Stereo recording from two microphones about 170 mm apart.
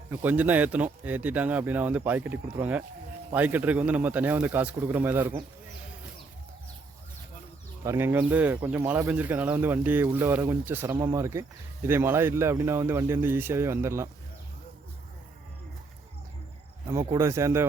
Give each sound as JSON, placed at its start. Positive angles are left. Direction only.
{"t": 0.1, "sound": "speech", "side_deg": -10}
{"t": 7.9, "sound": "speech", "side_deg": -10}
{"t": 16.8, "sound": "speech", "side_deg": -20}